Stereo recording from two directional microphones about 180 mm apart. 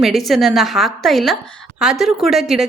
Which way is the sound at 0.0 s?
Centre (ahead or behind).